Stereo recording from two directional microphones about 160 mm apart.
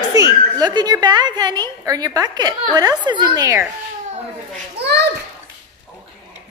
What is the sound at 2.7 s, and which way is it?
Speech, 25° right (ahead or behind).